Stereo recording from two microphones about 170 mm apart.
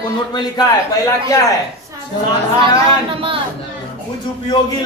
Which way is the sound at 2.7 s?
30° right (ahead or behind).